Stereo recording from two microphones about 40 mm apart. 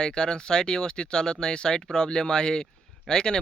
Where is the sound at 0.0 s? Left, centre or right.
Centre.